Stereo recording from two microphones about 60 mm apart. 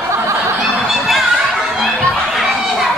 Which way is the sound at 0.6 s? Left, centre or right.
Centre.